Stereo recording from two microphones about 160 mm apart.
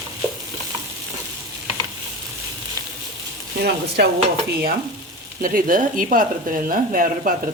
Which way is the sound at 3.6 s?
85° right.